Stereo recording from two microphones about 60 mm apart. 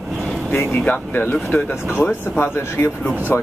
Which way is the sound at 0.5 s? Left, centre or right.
Left.